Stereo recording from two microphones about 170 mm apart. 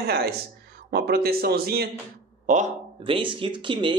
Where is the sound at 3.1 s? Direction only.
30° right (ahead or behind).